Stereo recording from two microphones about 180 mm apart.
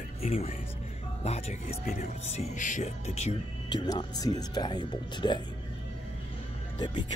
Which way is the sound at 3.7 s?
25° left (ahead or behind).